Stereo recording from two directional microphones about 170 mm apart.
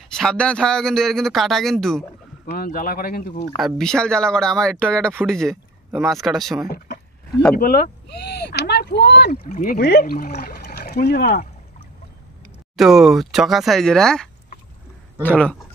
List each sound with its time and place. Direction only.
0.1 s a man's voice: 5° left (ahead or behind)
2.4 s speech: 60° left (ahead or behind)
3.5 s a man's voice: centre (ahead or behind)
7.5 s speech: 60° left (ahead or behind)
12.7 s a man's voice: centre (ahead or behind)